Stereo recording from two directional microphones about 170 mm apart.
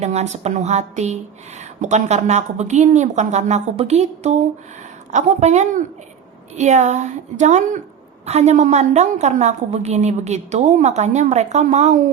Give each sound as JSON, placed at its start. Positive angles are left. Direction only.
{"t": 0.0, "sound": "a woman's voice", "side_deg": -40}